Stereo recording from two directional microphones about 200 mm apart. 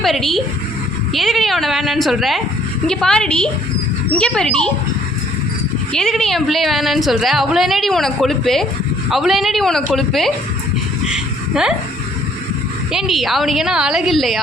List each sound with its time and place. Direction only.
0.0 s a woman's voice: centre (ahead or behind)
5.9 s a woman's voice: 5° left (ahead or behind)
11.1 s a sound: 5° right (ahead or behind)
12.9 s a woman's voice: centre (ahead or behind)